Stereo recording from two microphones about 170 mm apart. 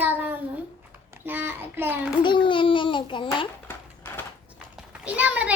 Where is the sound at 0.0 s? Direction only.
10° right (ahead or behind).